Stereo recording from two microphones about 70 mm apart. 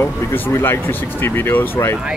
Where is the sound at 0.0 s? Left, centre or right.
Left.